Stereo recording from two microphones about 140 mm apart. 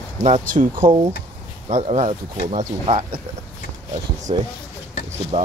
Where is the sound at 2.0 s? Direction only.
55° right (ahead or behind).